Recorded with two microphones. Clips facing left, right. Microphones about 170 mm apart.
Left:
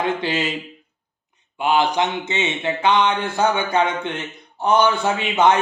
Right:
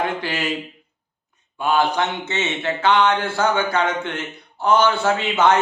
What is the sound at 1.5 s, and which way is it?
Speech, 15° left (ahead or behind).